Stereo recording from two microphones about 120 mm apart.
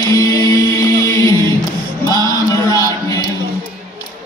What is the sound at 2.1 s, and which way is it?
Chant, 30° left (ahead or behind).